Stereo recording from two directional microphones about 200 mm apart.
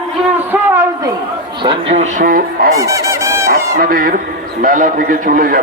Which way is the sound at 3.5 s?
45° right (ahead or behind).